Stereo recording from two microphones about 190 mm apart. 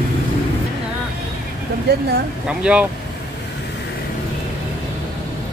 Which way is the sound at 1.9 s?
60° right (ahead or behind).